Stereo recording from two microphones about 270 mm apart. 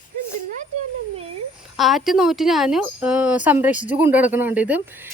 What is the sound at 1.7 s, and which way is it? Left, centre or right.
A woman's voice, centre.